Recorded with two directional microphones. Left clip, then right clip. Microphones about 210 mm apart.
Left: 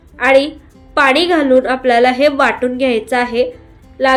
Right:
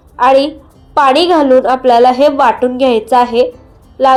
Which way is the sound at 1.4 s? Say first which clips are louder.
Right 3 dB; 5° right (ahead or behind).